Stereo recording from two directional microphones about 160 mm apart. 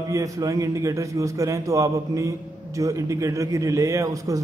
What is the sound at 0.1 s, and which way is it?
A man's voice, 20° right (ahead or behind).